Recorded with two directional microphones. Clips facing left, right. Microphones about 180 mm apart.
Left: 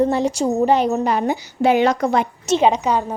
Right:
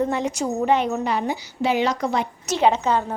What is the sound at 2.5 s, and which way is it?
Speech, 20° left (ahead or behind).